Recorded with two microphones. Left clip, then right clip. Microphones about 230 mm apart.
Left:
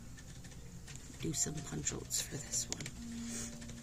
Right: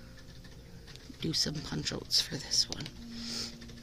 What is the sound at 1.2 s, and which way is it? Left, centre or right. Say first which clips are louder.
Speech: right 7 dB; right.